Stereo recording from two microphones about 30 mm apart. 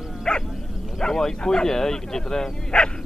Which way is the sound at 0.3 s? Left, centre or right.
Left.